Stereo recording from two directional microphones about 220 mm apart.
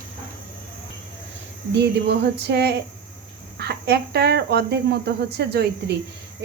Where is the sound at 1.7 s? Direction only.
50° right (ahead or behind).